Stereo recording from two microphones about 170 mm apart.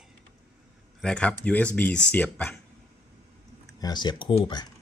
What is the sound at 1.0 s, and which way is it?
Speech, 5° left (ahead or behind).